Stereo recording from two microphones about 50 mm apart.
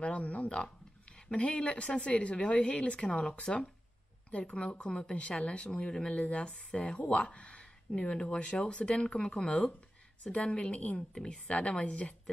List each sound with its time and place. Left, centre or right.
0.0 s speech: left